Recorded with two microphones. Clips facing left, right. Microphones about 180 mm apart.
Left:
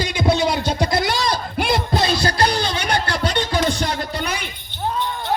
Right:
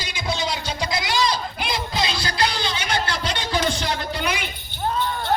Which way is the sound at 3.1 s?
45° left (ahead or behind).